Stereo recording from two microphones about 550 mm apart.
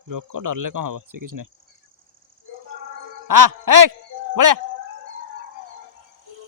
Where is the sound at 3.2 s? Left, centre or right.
Right.